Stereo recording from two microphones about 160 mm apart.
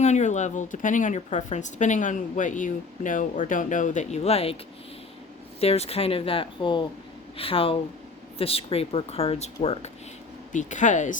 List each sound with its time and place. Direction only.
0.0 s speech: 45° left (ahead or behind)
5.5 s speech: 40° left (ahead or behind)